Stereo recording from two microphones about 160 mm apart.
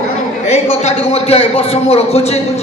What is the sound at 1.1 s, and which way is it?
Speech, 40° left (ahead or behind).